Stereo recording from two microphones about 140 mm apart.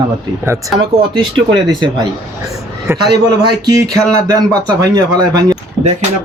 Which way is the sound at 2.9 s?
15° right (ahead or behind).